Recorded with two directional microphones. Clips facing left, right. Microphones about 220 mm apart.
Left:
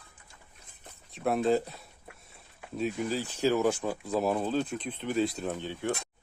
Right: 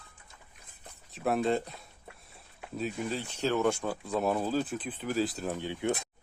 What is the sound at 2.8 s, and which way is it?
Speech, centre (ahead or behind).